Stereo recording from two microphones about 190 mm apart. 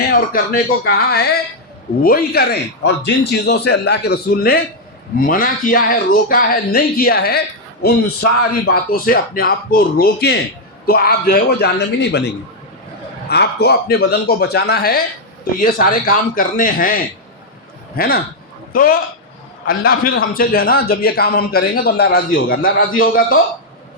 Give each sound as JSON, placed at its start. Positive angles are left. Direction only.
{"t": 0.3, "sound": "a man's voice", "side_deg": 50}